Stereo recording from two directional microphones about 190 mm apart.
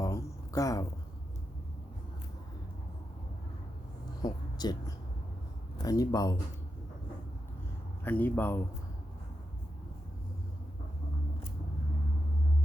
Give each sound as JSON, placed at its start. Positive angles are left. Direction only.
{"t": 0.0, "sound": "a sound", "side_deg": 15}
{"t": 4.2, "sound": "speech", "side_deg": 20}
{"t": 8.0, "sound": "speech", "side_deg": 10}